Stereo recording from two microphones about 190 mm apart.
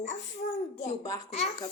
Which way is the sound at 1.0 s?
20° left (ahead or behind).